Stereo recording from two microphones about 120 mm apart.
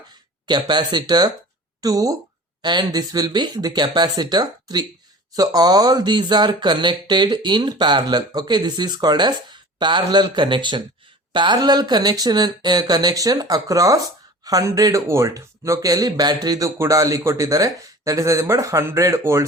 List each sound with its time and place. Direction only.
0.4 s speech: 40° right (ahead or behind); by 19.5 s 20° right (ahead or behind)